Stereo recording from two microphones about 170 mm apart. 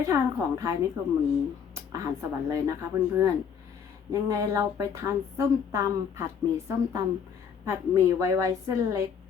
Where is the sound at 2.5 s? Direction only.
15° right (ahead or behind).